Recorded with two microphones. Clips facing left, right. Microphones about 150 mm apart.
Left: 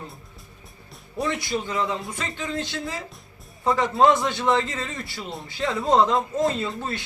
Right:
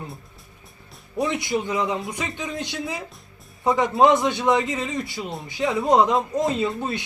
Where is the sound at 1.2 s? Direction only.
20° right (ahead or behind).